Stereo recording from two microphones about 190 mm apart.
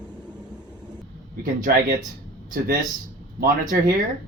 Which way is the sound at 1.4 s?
45° right (ahead or behind).